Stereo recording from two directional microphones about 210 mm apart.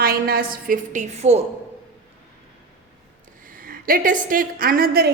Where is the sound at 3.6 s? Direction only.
40° right (ahead or behind).